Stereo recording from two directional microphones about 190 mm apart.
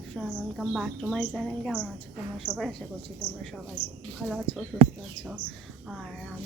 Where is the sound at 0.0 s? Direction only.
Centre (ahead or behind).